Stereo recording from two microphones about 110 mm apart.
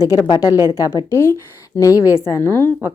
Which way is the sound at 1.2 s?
25° left (ahead or behind).